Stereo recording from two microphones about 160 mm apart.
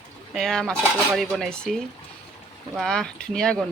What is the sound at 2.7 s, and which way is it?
Speech, 5° left (ahead or behind).